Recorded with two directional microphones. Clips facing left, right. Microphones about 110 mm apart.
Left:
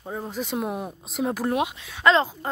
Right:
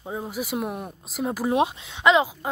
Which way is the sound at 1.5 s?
25° right (ahead or behind).